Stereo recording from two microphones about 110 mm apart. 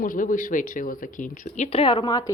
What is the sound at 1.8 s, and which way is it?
Speech, 45° left (ahead or behind).